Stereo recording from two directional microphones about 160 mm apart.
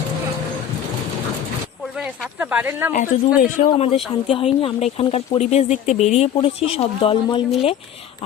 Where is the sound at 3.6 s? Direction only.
35° left (ahead or behind).